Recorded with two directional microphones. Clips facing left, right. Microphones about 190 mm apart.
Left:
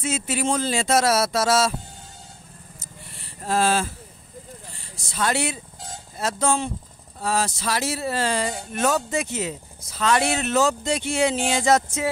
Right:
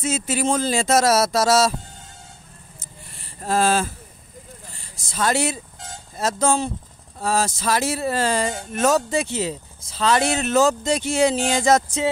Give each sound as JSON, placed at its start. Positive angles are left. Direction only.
{"t": 0.0, "sound": "speech", "side_deg": -40}
{"t": 3.4, "sound": "speech", "side_deg": -45}
{"t": 5.1, "sound": "speech", "side_deg": -40}